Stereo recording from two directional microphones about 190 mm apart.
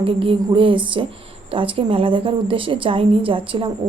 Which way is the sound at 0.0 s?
25° right (ahead or behind).